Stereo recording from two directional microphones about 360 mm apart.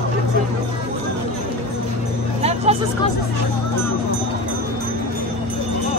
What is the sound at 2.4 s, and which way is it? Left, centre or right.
Music, centre.